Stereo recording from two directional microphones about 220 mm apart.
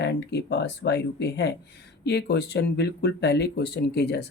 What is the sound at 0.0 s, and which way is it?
Speech, 50° left (ahead or behind).